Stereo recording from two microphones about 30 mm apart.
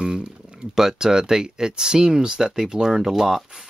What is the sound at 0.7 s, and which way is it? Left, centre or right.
Speech, centre.